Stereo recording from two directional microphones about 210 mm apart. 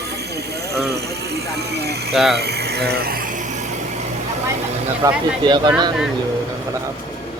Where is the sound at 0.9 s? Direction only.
50° right (ahead or behind).